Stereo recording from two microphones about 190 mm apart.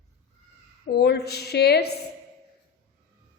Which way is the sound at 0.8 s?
60° left (ahead or behind).